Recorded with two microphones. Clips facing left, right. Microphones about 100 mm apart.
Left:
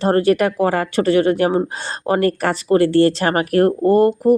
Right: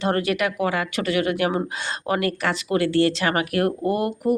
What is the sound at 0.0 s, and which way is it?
A woman's voice, 35° left (ahead or behind).